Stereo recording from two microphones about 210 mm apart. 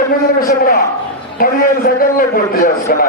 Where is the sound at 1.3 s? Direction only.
45° left (ahead or behind).